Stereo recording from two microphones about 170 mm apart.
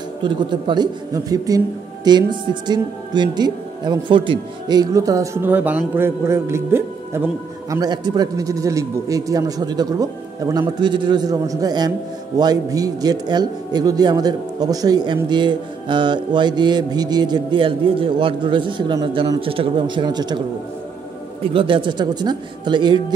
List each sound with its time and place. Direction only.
0.2 s speech: 25° right (ahead or behind)
21.4 s speech: 30° right (ahead or behind)